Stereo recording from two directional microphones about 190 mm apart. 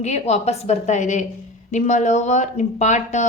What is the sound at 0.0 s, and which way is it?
A woman's voice, 35° left (ahead or behind).